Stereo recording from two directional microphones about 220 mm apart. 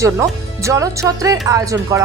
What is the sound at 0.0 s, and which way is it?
Speech, 15° right (ahead or behind).